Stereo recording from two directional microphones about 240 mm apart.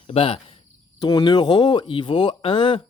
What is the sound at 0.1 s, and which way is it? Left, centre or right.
Speech, left.